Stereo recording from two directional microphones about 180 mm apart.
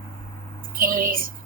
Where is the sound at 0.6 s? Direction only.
50° right (ahead or behind).